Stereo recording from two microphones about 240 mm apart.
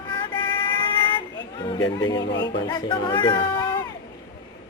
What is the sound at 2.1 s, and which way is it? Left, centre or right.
Speech, left.